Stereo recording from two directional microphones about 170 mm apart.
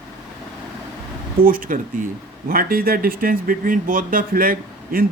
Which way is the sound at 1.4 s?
55° right (ahead or behind).